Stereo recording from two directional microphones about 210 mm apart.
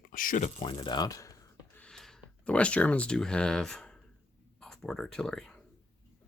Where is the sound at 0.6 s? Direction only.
25° left (ahead or behind).